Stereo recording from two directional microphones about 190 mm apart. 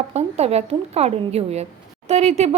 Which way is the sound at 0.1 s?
35° right (ahead or behind).